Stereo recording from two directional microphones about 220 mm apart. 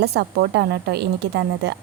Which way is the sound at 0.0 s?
50° right (ahead or behind).